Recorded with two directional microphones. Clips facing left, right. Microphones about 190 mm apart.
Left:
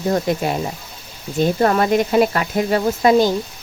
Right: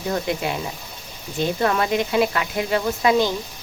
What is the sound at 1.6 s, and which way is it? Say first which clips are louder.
Speech: left 4 dB; 45° left (ahead or behind).